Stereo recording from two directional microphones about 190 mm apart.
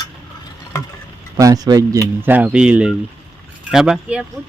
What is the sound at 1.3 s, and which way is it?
Speech, 20° right (ahead or behind).